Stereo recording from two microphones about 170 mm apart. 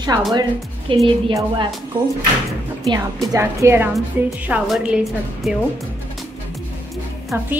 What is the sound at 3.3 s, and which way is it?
A woman's voice, 15° right (ahead or behind).